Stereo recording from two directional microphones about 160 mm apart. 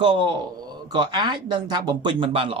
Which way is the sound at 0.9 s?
25° right (ahead or behind).